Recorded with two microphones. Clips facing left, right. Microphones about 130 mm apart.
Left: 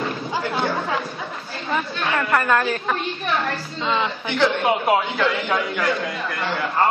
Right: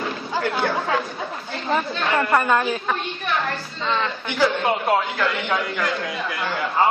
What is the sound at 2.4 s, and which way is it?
Speech, 10° right (ahead or behind).